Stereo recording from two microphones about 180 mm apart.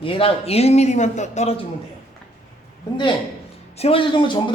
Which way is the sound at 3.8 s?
30° left (ahead or behind).